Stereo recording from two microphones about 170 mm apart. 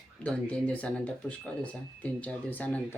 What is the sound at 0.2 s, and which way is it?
Speech, 10° left (ahead or behind).